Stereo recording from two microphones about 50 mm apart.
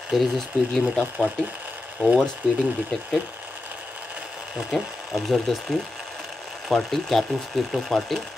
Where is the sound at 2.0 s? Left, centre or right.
Centre.